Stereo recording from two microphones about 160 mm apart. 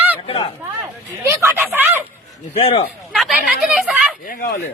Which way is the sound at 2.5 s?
40° left (ahead or behind).